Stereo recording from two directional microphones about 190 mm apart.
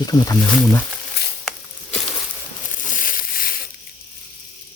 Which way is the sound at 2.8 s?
45° left (ahead or behind).